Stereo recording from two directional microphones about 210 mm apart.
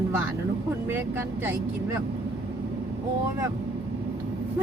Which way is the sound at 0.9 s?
10° right (ahead or behind).